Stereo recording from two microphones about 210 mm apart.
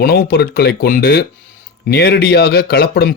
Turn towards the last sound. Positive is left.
turn(degrees=45)  # may be behind; listen again after turning